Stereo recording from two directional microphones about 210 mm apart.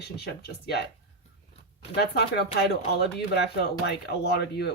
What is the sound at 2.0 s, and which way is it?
Speech, 50° left (ahead or behind).